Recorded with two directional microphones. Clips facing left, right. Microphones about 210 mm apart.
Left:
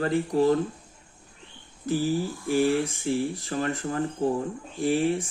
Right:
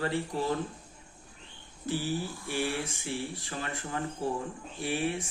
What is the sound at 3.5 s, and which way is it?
Speech, 40° left (ahead or behind).